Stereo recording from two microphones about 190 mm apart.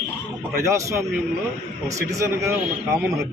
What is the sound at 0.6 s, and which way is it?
Speech, 15° right (ahead or behind).